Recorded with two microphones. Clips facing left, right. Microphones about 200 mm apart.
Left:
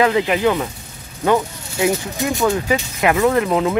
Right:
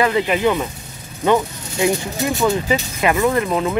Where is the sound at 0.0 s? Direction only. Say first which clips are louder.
Left 1 dB; 15° left (ahead or behind).